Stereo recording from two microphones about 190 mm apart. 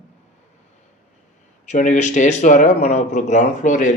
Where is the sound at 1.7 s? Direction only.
40° left (ahead or behind).